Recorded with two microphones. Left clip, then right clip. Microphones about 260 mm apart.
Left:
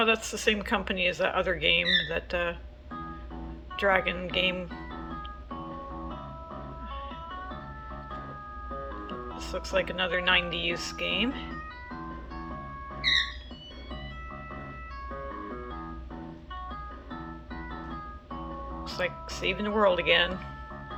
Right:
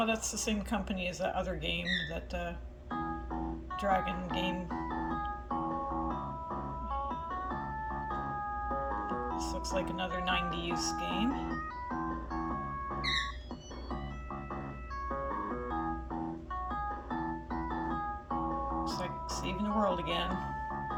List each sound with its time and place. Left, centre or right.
0.0 s a woman's voice: centre
3.8 s a woman's voice: centre
5.5 s music: centre
8.7 s music: right
9.3 s a woman's voice: centre
11.4 s music: right
15.1 s music: right
17.5 s music: right
18.9 s speech: centre